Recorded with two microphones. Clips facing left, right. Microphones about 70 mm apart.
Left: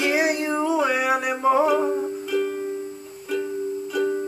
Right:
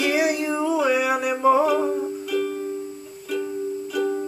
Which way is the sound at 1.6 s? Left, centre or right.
Centre.